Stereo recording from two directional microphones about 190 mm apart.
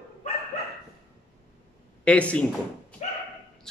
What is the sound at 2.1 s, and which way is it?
Speech, 5° left (ahead or behind).